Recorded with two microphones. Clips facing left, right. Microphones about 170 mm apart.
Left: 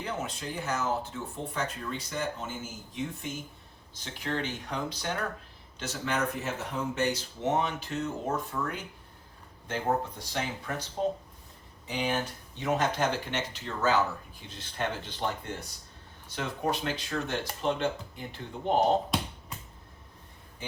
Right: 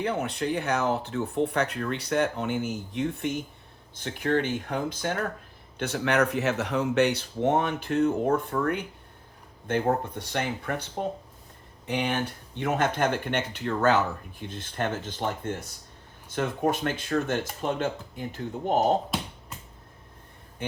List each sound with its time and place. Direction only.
0.0 s speech: 65° right (ahead or behind)
5.8 s speech: 65° right (ahead or behind)
11.9 s speech: 60° right (ahead or behind)
19.1 s finger snapping: 5° right (ahead or behind)